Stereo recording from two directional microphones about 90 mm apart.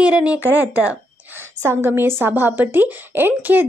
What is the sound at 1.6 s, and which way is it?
A woman's voice, 30° right (ahead or behind).